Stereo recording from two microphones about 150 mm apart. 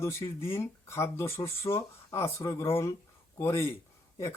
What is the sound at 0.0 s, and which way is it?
Speech, 15° left (ahead or behind).